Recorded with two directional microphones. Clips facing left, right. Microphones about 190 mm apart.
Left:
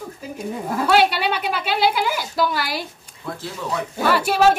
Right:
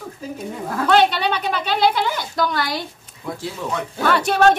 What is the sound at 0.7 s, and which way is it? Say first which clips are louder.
A woman's voice: right 1 dB; 10° left (ahead or behind).